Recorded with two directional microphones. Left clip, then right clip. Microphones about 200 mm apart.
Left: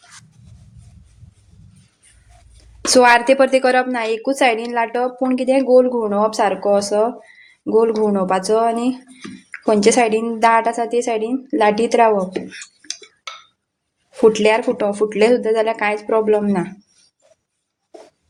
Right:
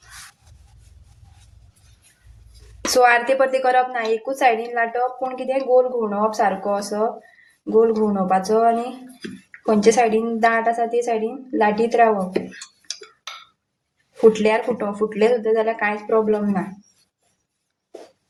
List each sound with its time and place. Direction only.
2.8 s a woman's voice: 45° left (ahead or behind)
14.1 s a woman's voice: 50° left (ahead or behind)